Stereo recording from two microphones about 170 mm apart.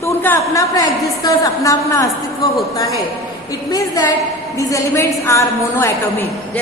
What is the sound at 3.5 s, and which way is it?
A woman's voice, 20° left (ahead or behind).